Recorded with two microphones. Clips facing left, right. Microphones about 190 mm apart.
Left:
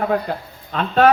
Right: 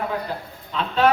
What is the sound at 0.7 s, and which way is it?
Speech, 55° left (ahead or behind).